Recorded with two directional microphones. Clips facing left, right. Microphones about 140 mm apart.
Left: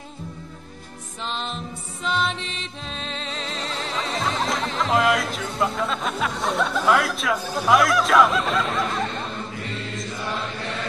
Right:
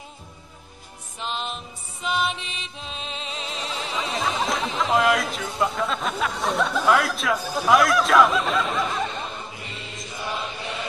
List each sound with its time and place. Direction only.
1.2 s music: 5° right (ahead or behind)